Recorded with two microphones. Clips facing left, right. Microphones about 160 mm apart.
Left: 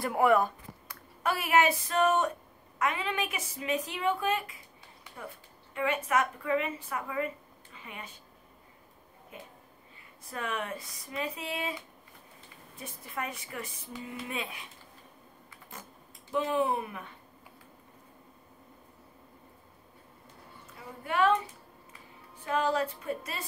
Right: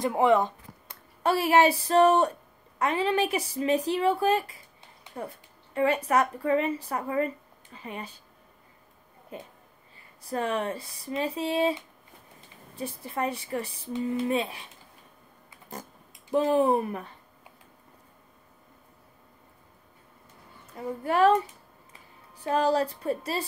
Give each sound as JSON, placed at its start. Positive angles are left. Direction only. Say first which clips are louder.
{"t": 0.0, "sound": "a woman's voice", "louder": "right 3 dB", "side_deg": -20}
{"t": 5.8, "sound": "a woman's voice", "louder": "right 5 dB", "side_deg": -35}
{"t": 9.3, "sound": "a woman's voice", "louder": "right 6 dB", "side_deg": -35}
{"t": 15.7, "sound": "speech", "louder": "right 8 dB", "side_deg": -40}
{"t": 20.7, "sound": "a woman's voice", "louder": "right 6 dB", "side_deg": -40}
{"t": 22.4, "sound": "a woman's voice", "louder": "right 5 dB", "side_deg": -35}